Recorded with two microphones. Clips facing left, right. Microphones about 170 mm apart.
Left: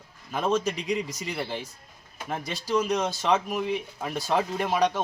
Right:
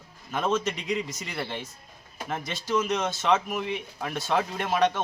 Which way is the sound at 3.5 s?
Centre (ahead or behind).